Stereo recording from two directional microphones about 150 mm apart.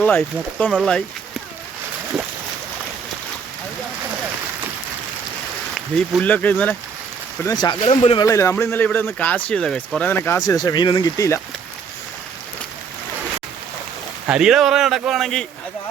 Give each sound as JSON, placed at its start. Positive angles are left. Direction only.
{"t": 0.0, "sound": "speech", "side_deg": 10}
{"t": 5.7, "sound": "speech", "side_deg": 5}
{"t": 7.4, "sound": "speech", "side_deg": 30}
{"t": 8.2, "sound": "speech", "side_deg": 20}
{"t": 10.5, "sound": "speech", "side_deg": 25}
{"t": 14.3, "sound": "speech", "side_deg": -5}